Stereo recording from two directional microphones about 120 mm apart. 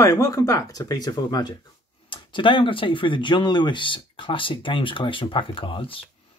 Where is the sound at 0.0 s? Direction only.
30° left (ahead or behind).